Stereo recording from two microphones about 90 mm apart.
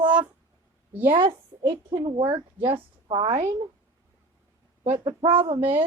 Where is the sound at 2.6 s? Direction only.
85° right.